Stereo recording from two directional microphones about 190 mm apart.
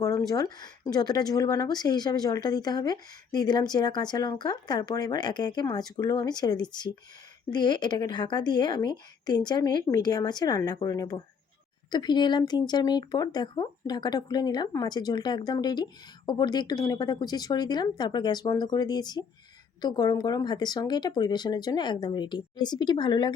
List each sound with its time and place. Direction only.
0.0 s speech: 15° left (ahead or behind)